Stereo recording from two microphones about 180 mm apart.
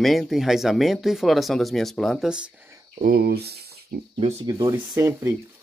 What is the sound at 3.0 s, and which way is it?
Speech, 60° right (ahead or behind).